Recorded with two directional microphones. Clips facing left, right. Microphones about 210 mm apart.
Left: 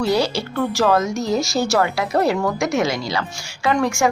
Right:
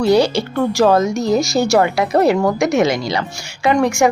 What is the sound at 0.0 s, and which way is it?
Speech, 15° right (ahead or behind).